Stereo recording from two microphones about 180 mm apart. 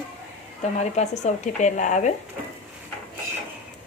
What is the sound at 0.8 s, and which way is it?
Speech, 40° left (ahead or behind).